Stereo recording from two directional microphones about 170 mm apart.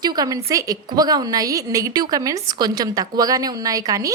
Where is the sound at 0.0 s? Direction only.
25° right (ahead or behind).